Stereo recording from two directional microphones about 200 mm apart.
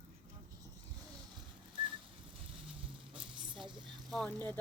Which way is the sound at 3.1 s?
25° right (ahead or behind).